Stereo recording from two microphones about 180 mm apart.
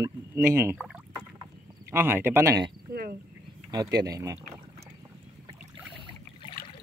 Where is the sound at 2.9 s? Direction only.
55° right (ahead or behind).